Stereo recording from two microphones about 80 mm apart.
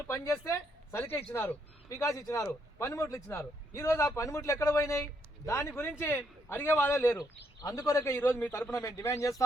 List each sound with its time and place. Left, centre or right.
0.1 s a man's voice: left
1.9 s a man's voice: left
7.2 s a man's voice: left
8.7 s speech: left